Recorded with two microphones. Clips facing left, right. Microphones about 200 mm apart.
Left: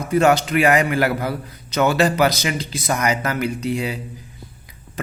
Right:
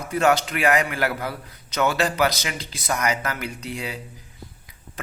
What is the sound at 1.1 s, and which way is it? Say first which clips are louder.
Speech: left 6 dB; 30° left (ahead or behind).